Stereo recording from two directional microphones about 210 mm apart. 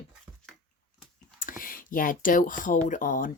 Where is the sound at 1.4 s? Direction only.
40° left (ahead or behind).